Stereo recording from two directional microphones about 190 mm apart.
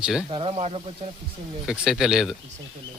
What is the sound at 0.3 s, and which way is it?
Speech, 30° right (ahead or behind).